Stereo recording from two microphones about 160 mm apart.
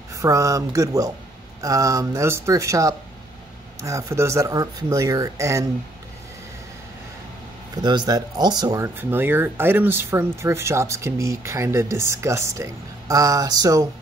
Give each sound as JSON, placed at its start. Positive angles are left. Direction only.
{"t": 0.1, "sound": "speech", "side_deg": -20}
{"t": 7.7, "sound": "speech", "side_deg": -25}